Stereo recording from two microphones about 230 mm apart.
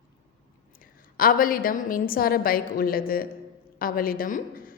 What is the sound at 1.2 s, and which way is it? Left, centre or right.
A woman's voice, left.